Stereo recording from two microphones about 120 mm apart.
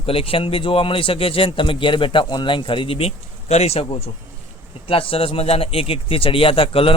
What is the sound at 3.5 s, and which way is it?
Speech, 60° left (ahead or behind).